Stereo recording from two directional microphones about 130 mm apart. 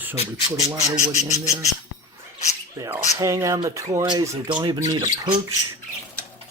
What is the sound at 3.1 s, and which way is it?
Speech, 25° right (ahead or behind).